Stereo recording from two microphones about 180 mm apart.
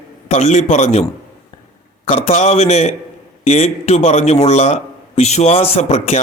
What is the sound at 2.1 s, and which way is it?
A man's voice, 35° left (ahead or behind).